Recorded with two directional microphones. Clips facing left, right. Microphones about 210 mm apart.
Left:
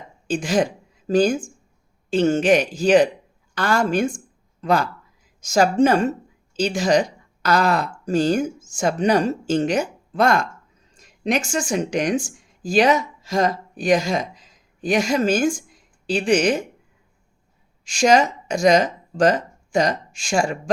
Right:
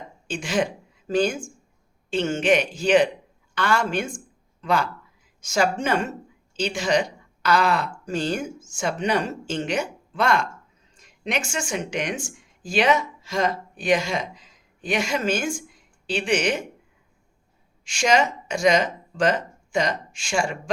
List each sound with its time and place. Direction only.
0.3 s a woman's voice: 40° left (ahead or behind)
17.8 s speech: 40° left (ahead or behind)